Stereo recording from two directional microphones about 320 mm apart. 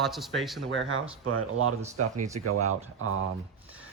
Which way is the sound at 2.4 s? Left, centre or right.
Right.